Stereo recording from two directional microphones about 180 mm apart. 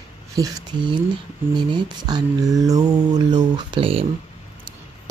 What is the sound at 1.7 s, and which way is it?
Speech, 25° right (ahead or behind).